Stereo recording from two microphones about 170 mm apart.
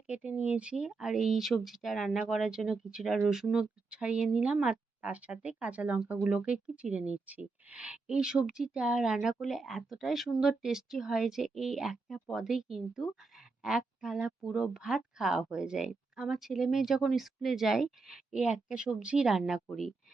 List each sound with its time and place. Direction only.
0.1 s speech: 5° right (ahead or behind)